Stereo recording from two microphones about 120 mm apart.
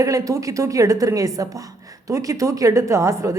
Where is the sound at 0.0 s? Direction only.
25° right (ahead or behind).